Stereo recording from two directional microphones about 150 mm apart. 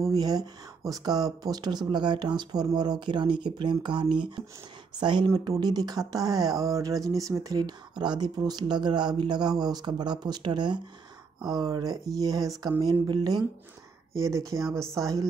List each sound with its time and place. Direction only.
0.1 s speech: 25° right (ahead or behind)